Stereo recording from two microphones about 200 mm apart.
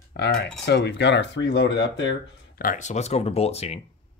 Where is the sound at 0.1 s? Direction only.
55° left (ahead or behind).